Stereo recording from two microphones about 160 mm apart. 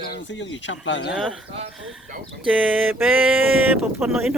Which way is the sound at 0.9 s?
90° left.